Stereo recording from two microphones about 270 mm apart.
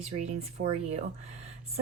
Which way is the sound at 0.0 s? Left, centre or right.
Right.